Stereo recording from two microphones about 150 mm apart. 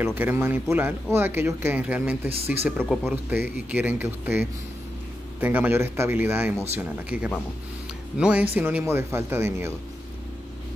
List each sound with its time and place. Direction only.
0.0 s speech: 15° right (ahead or behind)
2.9 s speech: centre (ahead or behind)
3.7 s speech: 15° right (ahead or behind)